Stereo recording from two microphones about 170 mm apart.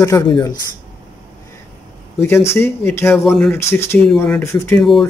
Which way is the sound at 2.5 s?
15° left (ahead or behind).